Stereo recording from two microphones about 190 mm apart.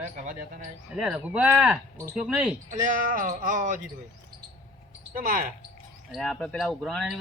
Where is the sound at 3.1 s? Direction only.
45° right (ahead or behind).